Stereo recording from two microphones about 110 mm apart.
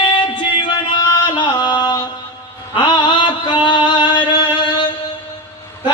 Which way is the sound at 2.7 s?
45° left (ahead or behind).